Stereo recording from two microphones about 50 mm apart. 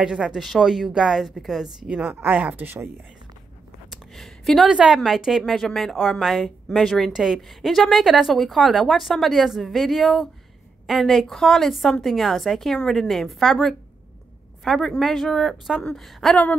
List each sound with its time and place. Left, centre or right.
0.0 s a woman's voice: centre
0.4 s a woman's voice: centre
1.9 s a woman's voice: right
2.6 s speech: right
4.1 s a sound: centre
4.6 s a woman's voice: centre